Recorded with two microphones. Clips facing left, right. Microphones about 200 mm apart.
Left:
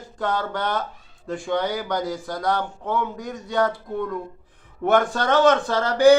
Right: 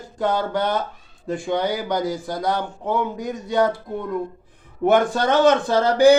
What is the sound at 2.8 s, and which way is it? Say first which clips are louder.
Speech: right 3 dB; 15° right (ahead or behind).